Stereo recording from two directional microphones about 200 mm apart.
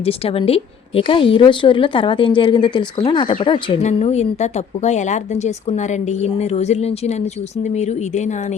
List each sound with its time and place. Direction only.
0.0 s a woman's voice: 30° left (ahead or behind)